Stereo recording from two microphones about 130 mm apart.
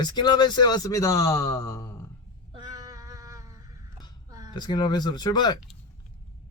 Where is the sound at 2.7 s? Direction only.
25° right (ahead or behind).